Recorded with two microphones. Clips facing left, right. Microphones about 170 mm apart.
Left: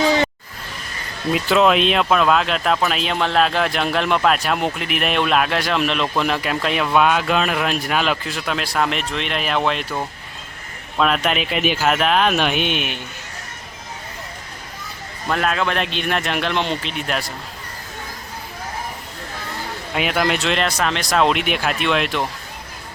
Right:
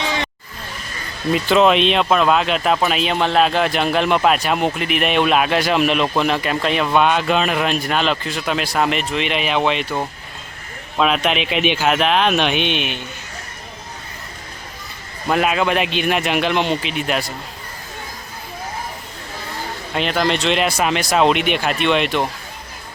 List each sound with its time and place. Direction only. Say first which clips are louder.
0.0 s a sound: left 6 dB; 40° left (ahead or behind)
1.3 s speech: right 2 dB; centre (ahead or behind)
15.3 s speech: right 3 dB; 10° right (ahead or behind)
19.9 s speech: right 1 dB; 5° left (ahead or behind)